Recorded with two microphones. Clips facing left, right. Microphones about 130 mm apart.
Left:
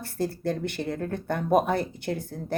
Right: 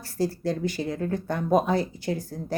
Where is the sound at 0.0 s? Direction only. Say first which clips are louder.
Right 2 dB; 55° left (ahead or behind).